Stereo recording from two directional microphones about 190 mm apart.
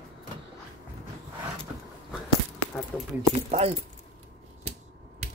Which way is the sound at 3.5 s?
35° right (ahead or behind).